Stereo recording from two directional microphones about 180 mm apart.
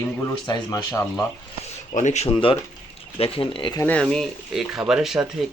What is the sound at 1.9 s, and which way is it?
Speech, 40° left (ahead or behind).